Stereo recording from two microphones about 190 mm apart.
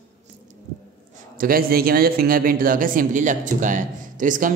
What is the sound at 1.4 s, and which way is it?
A man's voice, 50° right (ahead or behind).